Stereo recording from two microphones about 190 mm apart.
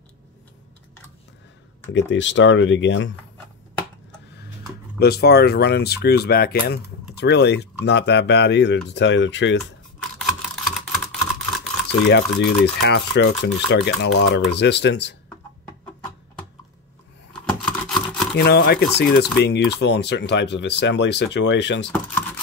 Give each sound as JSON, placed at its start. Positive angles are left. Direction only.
{"t": 2.0, "sound": "speech", "side_deg": 70}
{"t": 4.9, "sound": "speech", "side_deg": 55}
{"t": 10.1, "sound": "typing", "side_deg": 0}
{"t": 12.0, "sound": "speech", "side_deg": 65}
{"t": 17.3, "sound": "a sound", "side_deg": 5}
{"t": 18.3, "sound": "speech", "side_deg": 60}